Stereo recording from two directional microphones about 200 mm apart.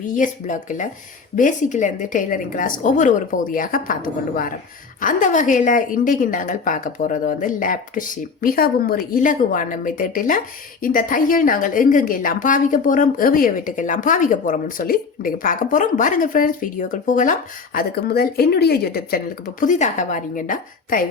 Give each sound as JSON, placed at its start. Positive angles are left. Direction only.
{"t": 0.2, "sound": "a woman's voice", "side_deg": 40}
{"t": 17.7, "sound": "speech", "side_deg": 50}